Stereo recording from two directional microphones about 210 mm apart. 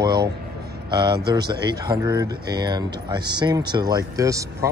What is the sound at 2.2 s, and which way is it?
A man's voice, 20° right (ahead or behind).